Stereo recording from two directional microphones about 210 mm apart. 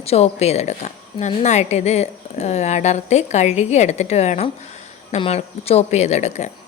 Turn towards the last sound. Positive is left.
turn(degrees=35)  # may be behind; listen again after turning